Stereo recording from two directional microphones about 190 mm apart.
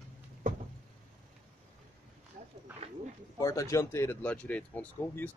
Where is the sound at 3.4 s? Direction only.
15° left (ahead or behind).